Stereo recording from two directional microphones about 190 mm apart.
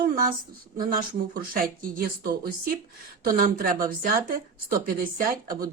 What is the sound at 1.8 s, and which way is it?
Speech, 50° right (ahead or behind).